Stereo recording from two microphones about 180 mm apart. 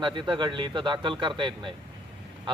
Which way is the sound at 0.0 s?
25° right (ahead or behind).